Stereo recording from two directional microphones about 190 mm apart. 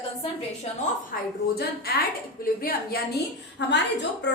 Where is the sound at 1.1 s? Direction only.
50° left (ahead or behind).